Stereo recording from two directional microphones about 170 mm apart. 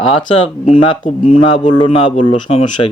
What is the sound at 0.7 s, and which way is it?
A man's voice, 30° left (ahead or behind).